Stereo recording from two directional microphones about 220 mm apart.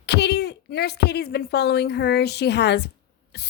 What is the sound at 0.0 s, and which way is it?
A woman's voice, 50° left (ahead or behind).